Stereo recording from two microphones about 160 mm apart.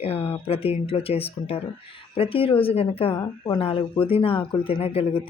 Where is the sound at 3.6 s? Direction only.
35° left (ahead or behind).